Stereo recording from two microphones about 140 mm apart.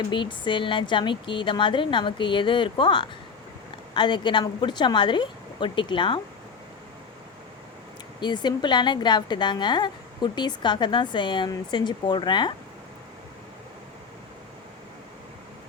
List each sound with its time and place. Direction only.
0.1 s a woman's voice: 35° left (ahead or behind)
8.2 s a woman's voice: 30° left (ahead or behind)